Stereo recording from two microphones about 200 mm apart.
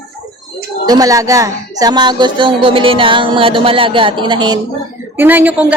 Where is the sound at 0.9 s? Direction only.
20° right (ahead or behind).